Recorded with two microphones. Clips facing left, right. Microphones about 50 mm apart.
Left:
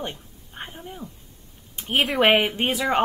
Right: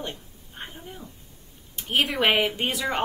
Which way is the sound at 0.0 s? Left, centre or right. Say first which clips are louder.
Left 2 dB; centre.